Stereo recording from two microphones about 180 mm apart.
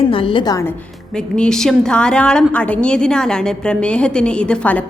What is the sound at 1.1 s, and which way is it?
A woman's voice, 5° left (ahead or behind).